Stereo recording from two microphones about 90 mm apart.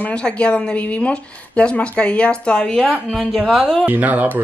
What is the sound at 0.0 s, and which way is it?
Speech, 10° left (ahead or behind).